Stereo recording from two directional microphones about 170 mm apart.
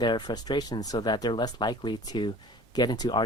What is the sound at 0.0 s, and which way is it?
Speech, 25° left (ahead or behind).